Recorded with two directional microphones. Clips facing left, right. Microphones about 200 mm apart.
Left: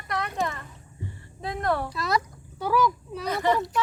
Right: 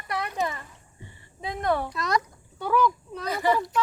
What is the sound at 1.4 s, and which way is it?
A child's voice, centre (ahead or behind).